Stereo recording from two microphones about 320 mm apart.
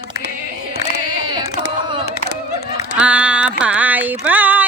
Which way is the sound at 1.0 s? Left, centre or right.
Centre.